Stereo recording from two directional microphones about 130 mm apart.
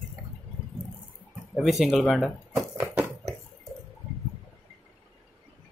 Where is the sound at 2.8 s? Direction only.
20° right (ahead or behind).